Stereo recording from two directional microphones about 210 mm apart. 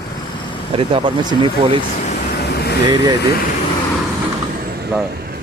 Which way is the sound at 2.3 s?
50° left (ahead or behind).